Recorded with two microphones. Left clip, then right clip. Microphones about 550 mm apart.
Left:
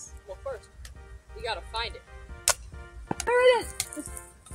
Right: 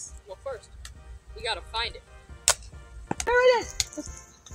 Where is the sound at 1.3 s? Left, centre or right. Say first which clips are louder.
Right 2 dB; left.